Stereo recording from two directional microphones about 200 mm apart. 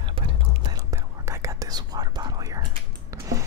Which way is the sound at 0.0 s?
25° right (ahead or behind).